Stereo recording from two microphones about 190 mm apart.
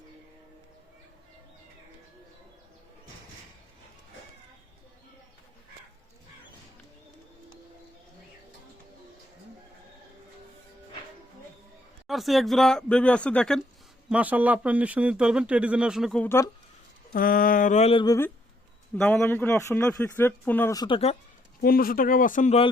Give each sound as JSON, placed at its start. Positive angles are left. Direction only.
{"t": 12.0, "sound": "speech", "side_deg": 0}
{"t": 14.1, "sound": "speech", "side_deg": -5}
{"t": 17.1, "sound": "speech", "side_deg": 50}
{"t": 18.0, "sound": "a man's voice", "side_deg": 20}
{"t": 21.6, "sound": "speech", "side_deg": 50}